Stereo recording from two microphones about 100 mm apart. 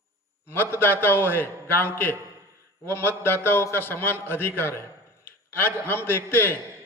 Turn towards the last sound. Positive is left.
turn(degrees=20)  # may be behind; listen again after turning